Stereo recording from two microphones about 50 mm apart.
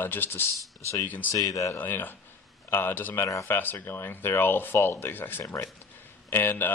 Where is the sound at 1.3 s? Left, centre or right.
Left.